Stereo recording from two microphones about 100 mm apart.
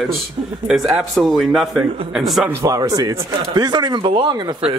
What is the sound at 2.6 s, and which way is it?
Speech, 35° right (ahead or behind).